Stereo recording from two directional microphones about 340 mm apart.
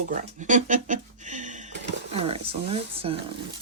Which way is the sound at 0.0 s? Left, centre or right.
Right.